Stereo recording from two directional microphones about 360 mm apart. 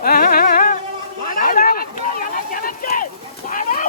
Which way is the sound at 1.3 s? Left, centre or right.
Left.